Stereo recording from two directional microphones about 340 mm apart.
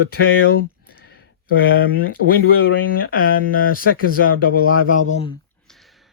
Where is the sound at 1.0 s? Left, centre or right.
Left.